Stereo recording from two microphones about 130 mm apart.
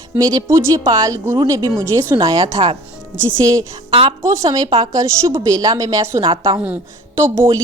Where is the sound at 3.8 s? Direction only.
45° right (ahead or behind).